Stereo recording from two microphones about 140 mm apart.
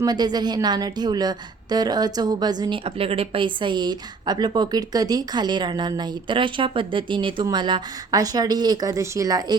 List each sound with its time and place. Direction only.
0.0 s a woman's voice: 30° right (ahead or behind)